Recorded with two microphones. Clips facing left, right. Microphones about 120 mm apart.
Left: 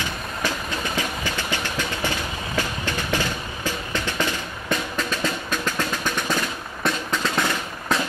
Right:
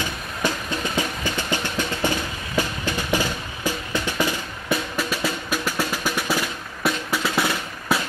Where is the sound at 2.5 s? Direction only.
15° right (ahead or behind).